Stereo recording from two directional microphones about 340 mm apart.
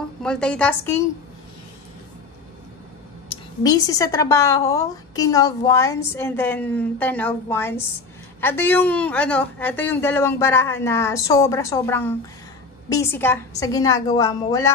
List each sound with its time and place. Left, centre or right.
0.2 s a woman's voice: centre
3.6 s a woman's voice: centre